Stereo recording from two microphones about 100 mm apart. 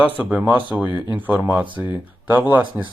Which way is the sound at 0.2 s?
15° right (ahead or behind).